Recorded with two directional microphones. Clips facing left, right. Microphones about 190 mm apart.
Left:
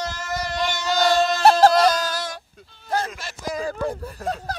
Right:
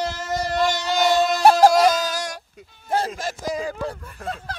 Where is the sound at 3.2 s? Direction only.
45° right (ahead or behind).